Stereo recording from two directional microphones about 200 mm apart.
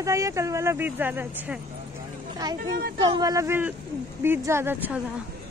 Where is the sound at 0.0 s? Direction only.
15° right (ahead or behind).